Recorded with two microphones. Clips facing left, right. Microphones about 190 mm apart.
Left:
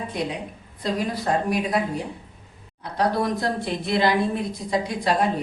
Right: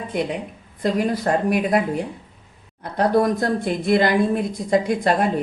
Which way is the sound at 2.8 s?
50° right (ahead or behind).